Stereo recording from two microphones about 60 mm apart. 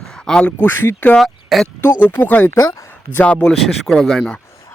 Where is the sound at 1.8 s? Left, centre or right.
Left.